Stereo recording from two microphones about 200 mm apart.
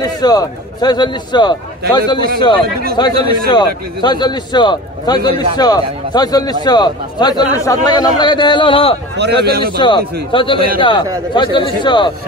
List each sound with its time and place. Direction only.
0.0 s a man's voice: 20° left (ahead or behind)
9.1 s a man's voice: 55° right (ahead or behind)
9.8 s a man's voice: 25° left (ahead or behind)